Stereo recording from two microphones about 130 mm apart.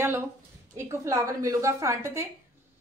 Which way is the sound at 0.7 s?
25° right (ahead or behind).